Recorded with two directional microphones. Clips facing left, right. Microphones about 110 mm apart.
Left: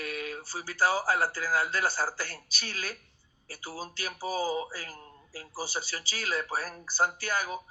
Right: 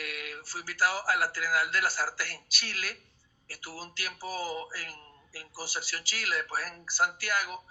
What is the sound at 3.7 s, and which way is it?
Speech, 25° left (ahead or behind).